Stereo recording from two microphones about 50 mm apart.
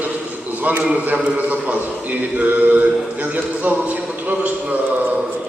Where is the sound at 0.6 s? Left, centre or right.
Right.